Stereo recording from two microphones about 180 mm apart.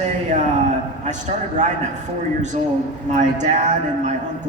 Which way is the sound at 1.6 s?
40° right (ahead or behind).